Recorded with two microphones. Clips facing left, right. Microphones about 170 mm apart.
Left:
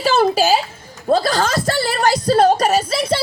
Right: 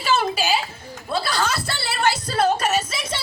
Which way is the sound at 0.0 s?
40° left (ahead or behind).